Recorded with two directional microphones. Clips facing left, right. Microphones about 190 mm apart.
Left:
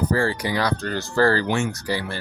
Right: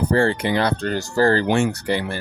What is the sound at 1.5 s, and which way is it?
Speech, 60° right (ahead or behind).